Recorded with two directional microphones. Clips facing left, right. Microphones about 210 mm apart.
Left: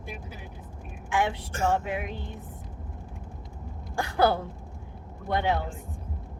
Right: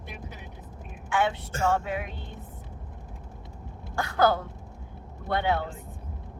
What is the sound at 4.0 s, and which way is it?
Speech, 15° left (ahead or behind).